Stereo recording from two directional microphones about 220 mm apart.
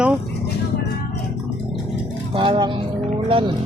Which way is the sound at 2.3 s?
20° right (ahead or behind).